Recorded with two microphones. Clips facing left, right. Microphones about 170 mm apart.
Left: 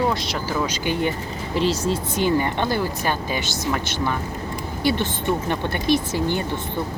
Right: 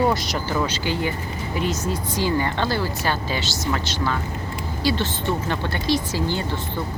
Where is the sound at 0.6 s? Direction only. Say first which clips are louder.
Left 1 dB; 15° left (ahead or behind).